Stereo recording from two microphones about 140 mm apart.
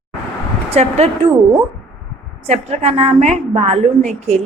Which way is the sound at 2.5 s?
50° right (ahead or behind).